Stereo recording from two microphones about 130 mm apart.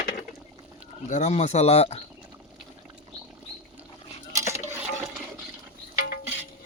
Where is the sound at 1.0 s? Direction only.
65° left (ahead or behind).